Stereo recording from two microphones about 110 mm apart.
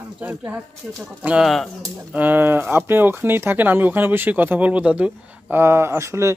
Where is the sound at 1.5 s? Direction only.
Centre (ahead or behind).